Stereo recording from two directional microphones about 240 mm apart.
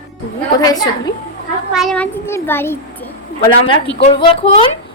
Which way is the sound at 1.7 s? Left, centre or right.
Centre.